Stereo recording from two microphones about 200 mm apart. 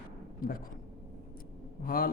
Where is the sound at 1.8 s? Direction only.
45° left (ahead or behind).